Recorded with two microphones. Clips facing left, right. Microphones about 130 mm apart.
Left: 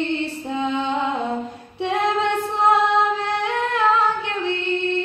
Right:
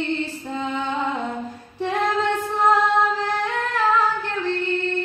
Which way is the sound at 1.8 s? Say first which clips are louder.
Left 1 dB; 20° left (ahead or behind).